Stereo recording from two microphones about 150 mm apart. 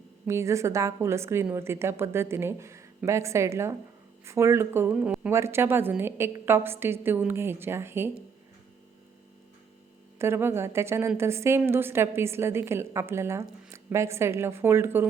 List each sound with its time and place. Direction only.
0.3 s a woman's voice: 20° right (ahead or behind)
10.2 s a woman's voice: 15° right (ahead or behind)